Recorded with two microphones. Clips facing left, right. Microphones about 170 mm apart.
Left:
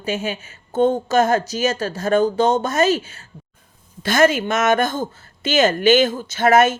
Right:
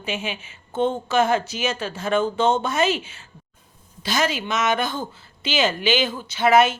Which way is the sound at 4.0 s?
50° left (ahead or behind).